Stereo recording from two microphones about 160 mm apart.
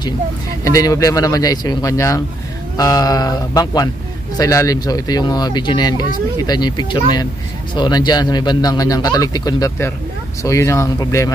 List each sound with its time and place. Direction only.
0.7 s speech: 20° left (ahead or behind)